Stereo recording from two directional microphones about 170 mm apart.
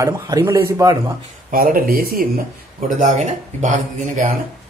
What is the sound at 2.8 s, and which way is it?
A man's voice, 50° right (ahead or behind).